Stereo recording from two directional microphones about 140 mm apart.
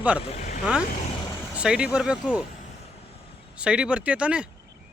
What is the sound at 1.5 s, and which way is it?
Speech, 5° right (ahead or behind).